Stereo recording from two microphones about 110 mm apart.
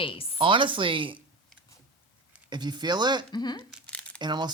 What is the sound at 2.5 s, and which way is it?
Speech, 40° right (ahead or behind).